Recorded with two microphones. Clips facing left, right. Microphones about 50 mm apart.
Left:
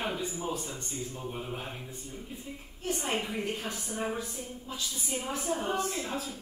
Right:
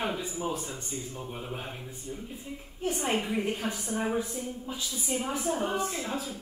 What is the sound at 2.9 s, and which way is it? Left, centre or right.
A woman's voice, right.